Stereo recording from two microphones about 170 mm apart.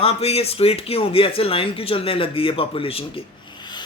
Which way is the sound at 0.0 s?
35° left (ahead or behind).